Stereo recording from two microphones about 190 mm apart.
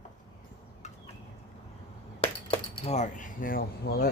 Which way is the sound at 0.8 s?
35° left (ahead or behind).